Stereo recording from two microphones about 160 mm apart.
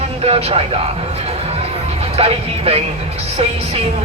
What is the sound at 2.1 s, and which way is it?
Speech, 40° right (ahead or behind).